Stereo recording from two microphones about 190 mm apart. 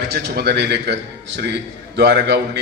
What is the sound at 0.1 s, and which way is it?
A man's voice, 55° right (ahead or behind).